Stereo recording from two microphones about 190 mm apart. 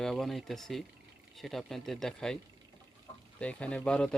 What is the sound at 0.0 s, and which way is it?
Speech, centre (ahead or behind).